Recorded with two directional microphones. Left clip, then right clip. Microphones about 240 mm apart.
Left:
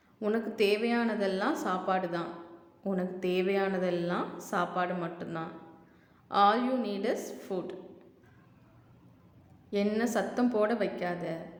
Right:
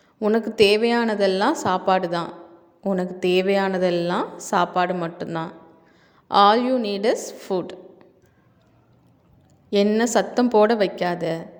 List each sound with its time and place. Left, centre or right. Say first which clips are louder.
0.2 s a woman's voice: right 11 dB; right
9.6 s a woman's voice: right 11 dB; right